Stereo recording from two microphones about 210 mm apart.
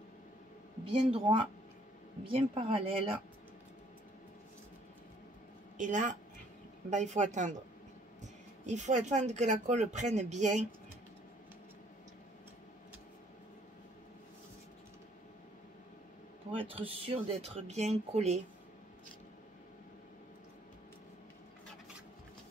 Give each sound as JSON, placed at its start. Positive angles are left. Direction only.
{"t": 1.1, "sound": "speech", "side_deg": -25}
{"t": 5.8, "sound": "speech", "side_deg": -35}
{"t": 16.5, "sound": "speech", "side_deg": -25}